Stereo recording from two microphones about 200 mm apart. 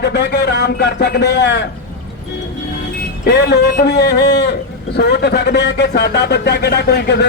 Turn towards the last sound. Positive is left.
turn(degrees=55)  # may be behind; listen again after turning